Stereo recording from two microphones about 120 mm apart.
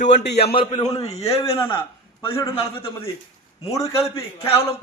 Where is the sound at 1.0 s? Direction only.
60° left (ahead or behind).